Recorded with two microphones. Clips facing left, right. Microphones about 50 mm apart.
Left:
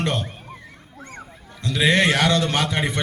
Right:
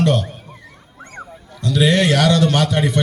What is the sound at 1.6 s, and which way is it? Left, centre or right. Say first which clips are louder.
A man's voice: right 3 dB; left.